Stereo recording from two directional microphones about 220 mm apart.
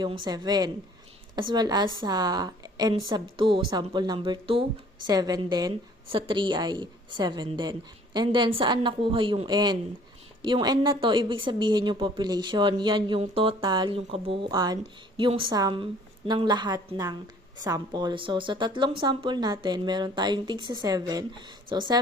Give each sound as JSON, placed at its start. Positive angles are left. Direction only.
{"t": 0.0, "sound": "a woman's voice", "side_deg": -20}